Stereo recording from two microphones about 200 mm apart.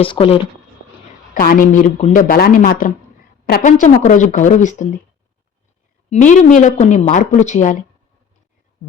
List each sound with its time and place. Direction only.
0.0 s speech: 25° left (ahead or behind)
1.3 s speech: 45° left (ahead or behind)
6.1 s speech: 35° left (ahead or behind)